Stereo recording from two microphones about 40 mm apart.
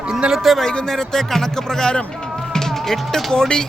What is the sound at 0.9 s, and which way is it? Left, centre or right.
Speech, centre.